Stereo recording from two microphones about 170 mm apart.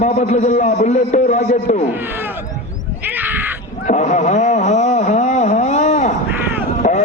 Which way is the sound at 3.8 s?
45° left (ahead or behind).